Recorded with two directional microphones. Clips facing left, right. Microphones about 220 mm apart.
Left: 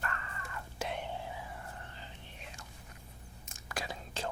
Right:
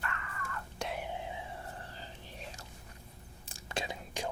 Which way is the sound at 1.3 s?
25° right (ahead or behind).